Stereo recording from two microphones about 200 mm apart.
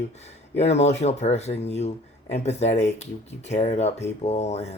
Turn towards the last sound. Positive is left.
turn(degrees=35)  # may be behind; listen again after turning